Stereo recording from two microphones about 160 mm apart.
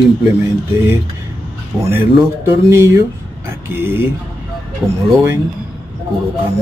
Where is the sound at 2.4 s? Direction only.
15° right (ahead or behind).